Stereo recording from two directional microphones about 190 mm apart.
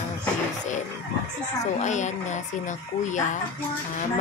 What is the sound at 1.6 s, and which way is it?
A woman's voice, 40° left (ahead or behind).